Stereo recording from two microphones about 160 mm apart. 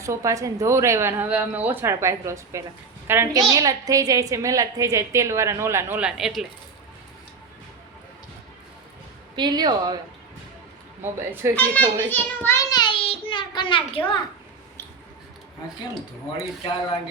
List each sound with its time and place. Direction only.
0.0 s a woman's voice: 20° right (ahead or behind); by 6.4 s 5° right (ahead or behind)
9.3 s a woman's voice: 25° right (ahead or behind)
11.0 s speech: 15° right (ahead or behind)
11.5 s a child's voice: 10° left (ahead or behind); by 14.0 s 30° left (ahead or behind)